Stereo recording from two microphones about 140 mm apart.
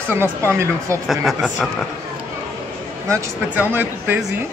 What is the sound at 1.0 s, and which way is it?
Speech, centre (ahead or behind).